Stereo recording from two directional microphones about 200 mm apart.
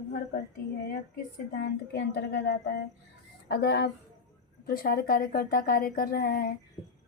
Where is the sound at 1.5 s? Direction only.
55° left (ahead or behind).